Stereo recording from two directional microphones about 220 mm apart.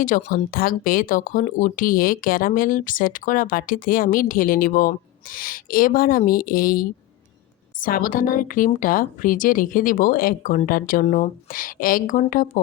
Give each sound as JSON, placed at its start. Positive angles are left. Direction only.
{"t": 0.0, "sound": "speech", "side_deg": 35}